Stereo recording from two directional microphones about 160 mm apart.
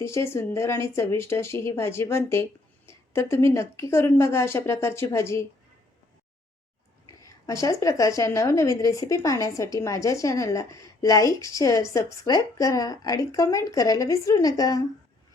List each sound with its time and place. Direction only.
0.0 s speech: 15° left (ahead or behind)
7.2 s a woman's voice: 20° left (ahead or behind)